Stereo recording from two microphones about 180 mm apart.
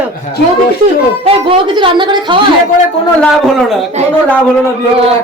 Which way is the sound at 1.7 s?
25° right (ahead or behind).